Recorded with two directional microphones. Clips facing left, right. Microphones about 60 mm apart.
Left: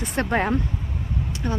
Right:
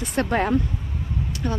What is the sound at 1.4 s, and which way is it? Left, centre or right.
Speech, centre.